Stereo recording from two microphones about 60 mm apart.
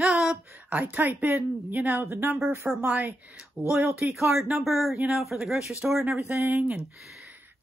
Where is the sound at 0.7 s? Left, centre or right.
Right.